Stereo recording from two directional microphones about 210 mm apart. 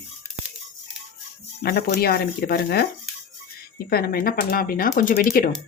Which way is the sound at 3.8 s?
45° left (ahead or behind).